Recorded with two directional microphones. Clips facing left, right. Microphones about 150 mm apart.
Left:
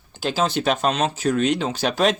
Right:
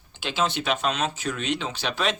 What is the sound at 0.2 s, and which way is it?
Speech, 40° left (ahead or behind).